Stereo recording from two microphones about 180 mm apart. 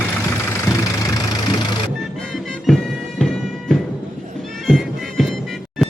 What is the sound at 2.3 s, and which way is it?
Music, centre (ahead or behind).